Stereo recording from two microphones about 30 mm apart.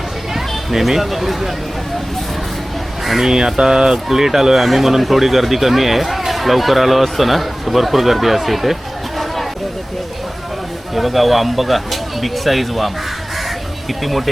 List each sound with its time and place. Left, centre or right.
0.3 s speech: centre
3.0 s a sound: centre
3.2 s speech: centre
10.9 s speech: centre
14.0 s speech: centre